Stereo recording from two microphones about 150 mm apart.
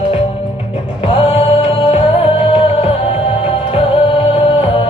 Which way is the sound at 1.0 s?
35° left (ahead or behind).